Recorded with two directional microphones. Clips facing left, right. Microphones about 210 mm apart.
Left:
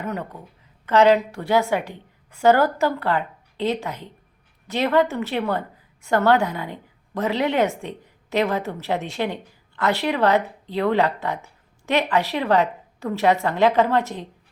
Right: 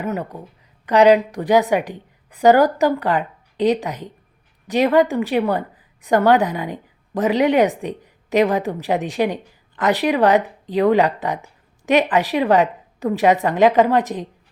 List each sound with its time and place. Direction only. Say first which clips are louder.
0.0 s a woman's voice: right 4 dB; 10° right (ahead or behind)